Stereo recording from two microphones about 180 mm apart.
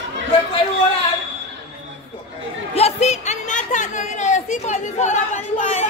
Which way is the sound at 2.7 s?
35° left (ahead or behind).